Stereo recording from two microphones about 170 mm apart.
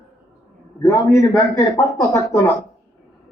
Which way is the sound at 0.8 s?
15° left (ahead or behind).